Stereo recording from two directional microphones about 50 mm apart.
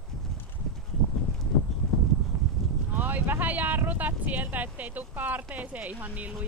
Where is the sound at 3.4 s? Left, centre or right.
Right.